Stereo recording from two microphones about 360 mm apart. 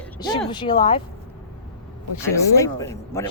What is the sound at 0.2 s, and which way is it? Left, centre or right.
Speech, centre.